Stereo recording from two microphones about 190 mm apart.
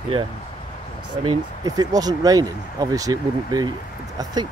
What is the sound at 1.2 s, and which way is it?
Speech, 20° right (ahead or behind).